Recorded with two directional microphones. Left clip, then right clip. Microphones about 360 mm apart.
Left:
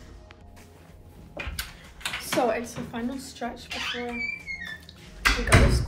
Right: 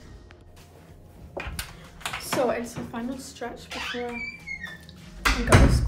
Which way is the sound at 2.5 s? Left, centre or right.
Centre.